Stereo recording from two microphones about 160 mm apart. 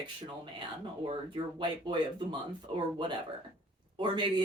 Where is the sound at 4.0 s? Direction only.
30° right (ahead or behind).